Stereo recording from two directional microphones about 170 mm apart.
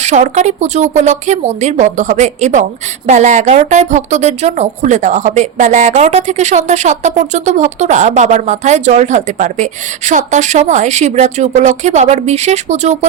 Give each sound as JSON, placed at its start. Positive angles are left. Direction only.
{"t": 0.0, "sound": "a woman's voice", "side_deg": -45}